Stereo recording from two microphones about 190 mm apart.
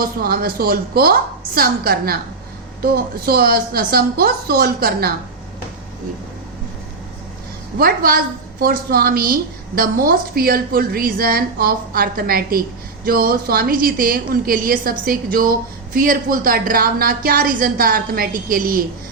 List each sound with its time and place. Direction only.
0.0 s a woman's voice: 50° right (ahead or behind)
7.8 s a woman's voice: 50° right (ahead or behind)